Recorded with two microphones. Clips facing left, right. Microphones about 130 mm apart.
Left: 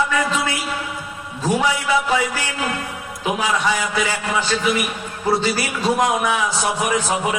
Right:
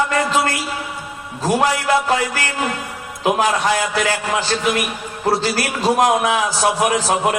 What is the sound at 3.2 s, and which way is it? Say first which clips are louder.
Speech: right 5 dB; 90° right.